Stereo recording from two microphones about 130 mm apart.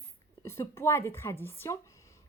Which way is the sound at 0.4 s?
20° left (ahead or behind).